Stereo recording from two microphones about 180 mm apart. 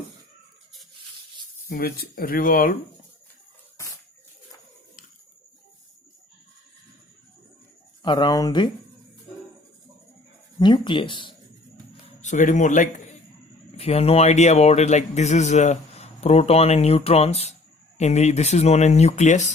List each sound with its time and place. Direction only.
1.7 s speech: 60° left (ahead or behind)
8.0 s speech: 25° left (ahead or behind)
10.6 s speech: 25° left (ahead or behind)
12.2 s a man's voice: 45° left (ahead or behind)
13.7 s a man's voice: 35° left (ahead or behind)